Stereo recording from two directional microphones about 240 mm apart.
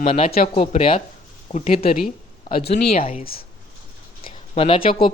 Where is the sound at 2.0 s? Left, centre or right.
Left.